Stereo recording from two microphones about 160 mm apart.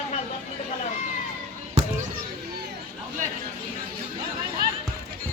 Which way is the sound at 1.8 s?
45° right (ahead or behind).